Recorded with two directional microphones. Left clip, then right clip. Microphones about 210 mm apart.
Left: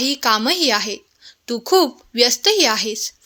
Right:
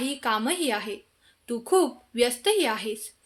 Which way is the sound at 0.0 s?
45° left (ahead or behind).